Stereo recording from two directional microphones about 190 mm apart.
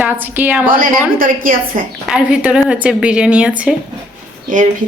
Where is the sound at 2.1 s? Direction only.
5° right (ahead or behind).